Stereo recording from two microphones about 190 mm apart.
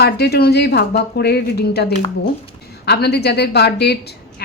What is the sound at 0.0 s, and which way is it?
A woman's voice, 60° left (ahead or behind).